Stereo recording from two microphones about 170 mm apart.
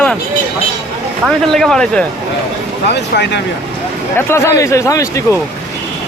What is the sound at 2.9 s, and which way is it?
Speech, 85° left.